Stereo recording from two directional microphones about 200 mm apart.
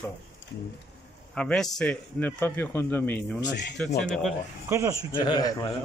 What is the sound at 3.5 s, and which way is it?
Speech, 60° left (ahead or behind).